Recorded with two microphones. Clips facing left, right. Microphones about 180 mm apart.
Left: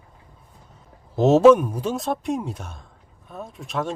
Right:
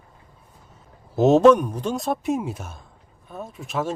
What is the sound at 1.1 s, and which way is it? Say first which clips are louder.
Speech: left 1 dB; centre (ahead or behind).